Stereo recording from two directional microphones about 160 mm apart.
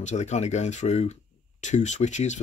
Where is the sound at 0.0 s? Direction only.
45° left (ahead or behind).